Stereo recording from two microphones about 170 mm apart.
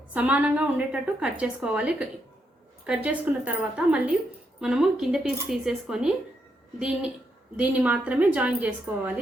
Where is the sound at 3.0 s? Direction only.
10° right (ahead or behind).